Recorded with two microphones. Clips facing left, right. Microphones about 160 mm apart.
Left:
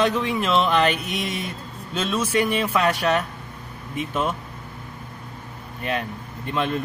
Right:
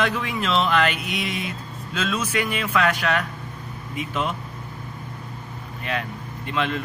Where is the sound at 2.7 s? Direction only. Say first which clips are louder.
Left 1 dB; 35° left (ahead or behind).